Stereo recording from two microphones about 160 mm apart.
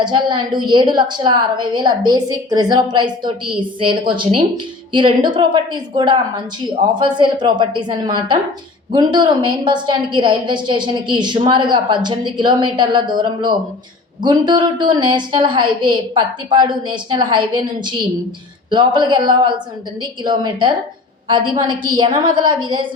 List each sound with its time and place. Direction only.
0.0 s a woman's voice: 30° right (ahead or behind)